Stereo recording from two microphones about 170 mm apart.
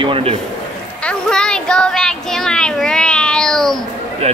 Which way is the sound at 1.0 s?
5° left (ahead or behind).